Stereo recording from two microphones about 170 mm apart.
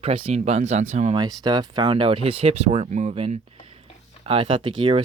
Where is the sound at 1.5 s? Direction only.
25° right (ahead or behind).